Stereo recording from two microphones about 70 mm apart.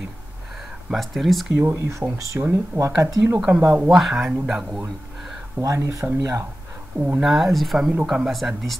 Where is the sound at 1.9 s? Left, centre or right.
Right.